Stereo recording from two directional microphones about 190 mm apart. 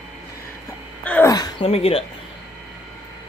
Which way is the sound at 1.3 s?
20° left (ahead or behind).